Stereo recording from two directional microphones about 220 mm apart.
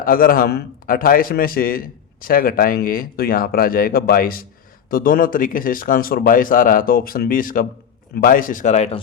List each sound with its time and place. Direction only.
0.0 s a man's voice: 40° left (ahead or behind)